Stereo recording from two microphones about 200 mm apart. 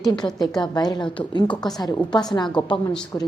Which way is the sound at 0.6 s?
20° left (ahead or behind).